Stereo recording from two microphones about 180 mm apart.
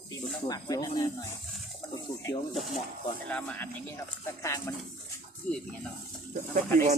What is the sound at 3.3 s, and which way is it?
Speech, 10° left (ahead or behind).